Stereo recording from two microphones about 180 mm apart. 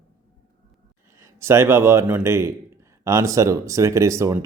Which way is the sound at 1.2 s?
15° right (ahead or behind).